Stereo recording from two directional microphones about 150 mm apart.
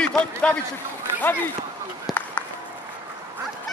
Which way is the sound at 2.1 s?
Centre (ahead or behind).